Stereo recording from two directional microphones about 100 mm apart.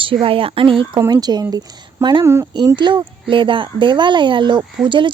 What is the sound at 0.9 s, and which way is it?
A woman's voice, 40° right (ahead or behind).